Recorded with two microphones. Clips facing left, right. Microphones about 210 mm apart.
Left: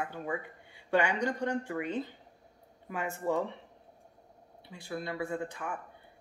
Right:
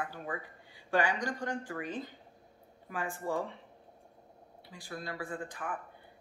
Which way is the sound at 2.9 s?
25° left (ahead or behind).